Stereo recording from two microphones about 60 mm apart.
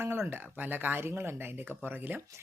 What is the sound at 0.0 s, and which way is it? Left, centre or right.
Speech, right.